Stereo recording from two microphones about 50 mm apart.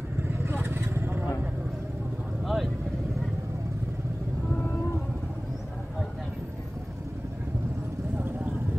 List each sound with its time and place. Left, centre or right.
0.2 s vehicle: right
2.4 s vehicle: centre
4.6 s rumble: left